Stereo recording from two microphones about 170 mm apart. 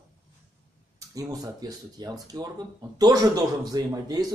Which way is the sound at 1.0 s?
20° right (ahead or behind).